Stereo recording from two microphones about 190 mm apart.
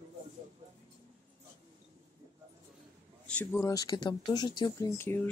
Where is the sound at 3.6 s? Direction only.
20° left (ahead or behind).